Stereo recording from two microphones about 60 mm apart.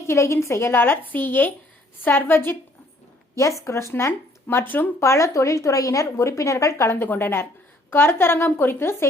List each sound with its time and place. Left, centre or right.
0.1 s a woman's voice: left
3.6 s speech: left
4.4 s a woman's voice: left
4.9 s a woman's voice: left
6.9 s a woman's voice: left